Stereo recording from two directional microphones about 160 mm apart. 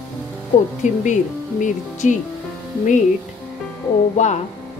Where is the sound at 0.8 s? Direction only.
50° left (ahead or behind).